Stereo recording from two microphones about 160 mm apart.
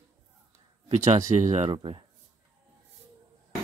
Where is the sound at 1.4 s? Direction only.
45° right (ahead or behind).